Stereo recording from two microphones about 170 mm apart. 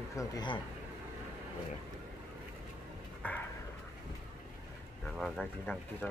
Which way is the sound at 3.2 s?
10° left (ahead or behind).